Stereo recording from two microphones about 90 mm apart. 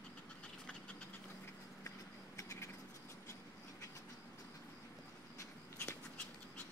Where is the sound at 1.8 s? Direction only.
35° left (ahead or behind).